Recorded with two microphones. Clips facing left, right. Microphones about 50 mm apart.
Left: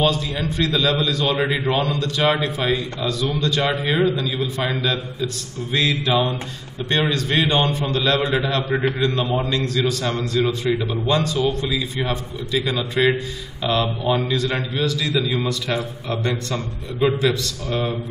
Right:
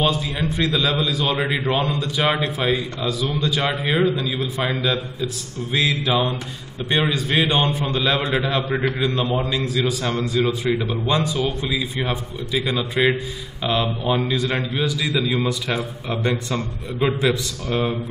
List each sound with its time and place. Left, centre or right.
0.0 s a man's voice: centre